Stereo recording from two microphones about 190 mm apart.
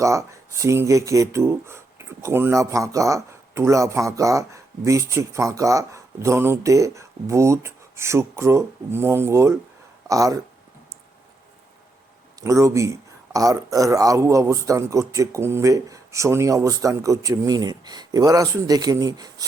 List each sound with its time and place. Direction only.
0.0 s speech: 15° right (ahead or behind)
12.4 s speech: 15° right (ahead or behind)